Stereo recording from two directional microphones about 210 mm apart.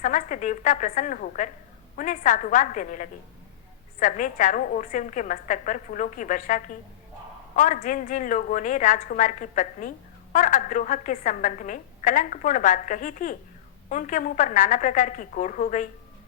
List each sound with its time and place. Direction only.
0.0 s a woman's voice: 35° left (ahead or behind)